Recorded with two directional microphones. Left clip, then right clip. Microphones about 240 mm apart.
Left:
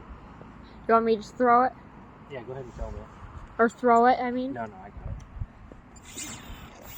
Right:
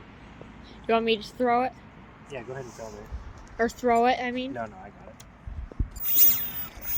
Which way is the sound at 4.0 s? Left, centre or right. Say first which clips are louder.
Left 2 dB; centre.